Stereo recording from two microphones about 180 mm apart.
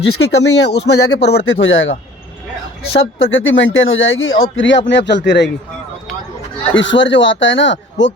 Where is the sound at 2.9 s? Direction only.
90° left.